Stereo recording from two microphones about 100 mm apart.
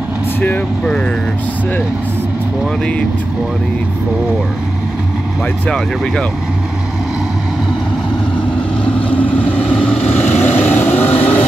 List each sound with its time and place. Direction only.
0.4 s speech: 15° left (ahead or behind)
9.6 s vehicle: 10° left (ahead or behind)